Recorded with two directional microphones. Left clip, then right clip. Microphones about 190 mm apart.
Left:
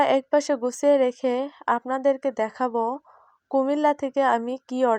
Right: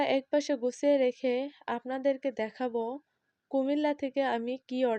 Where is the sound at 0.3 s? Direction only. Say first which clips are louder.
Left 7 dB; 15° left (ahead or behind).